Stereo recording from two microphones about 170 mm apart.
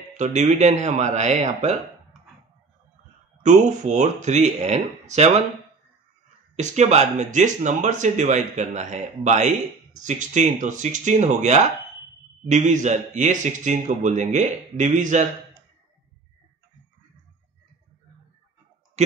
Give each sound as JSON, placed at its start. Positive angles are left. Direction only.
{"t": 0.2, "sound": "speech", "side_deg": -45}
{"t": 3.4, "sound": "speech", "side_deg": -45}
{"t": 6.5, "sound": "speech", "side_deg": -40}
{"t": 19.0, "sound": "speech", "side_deg": -40}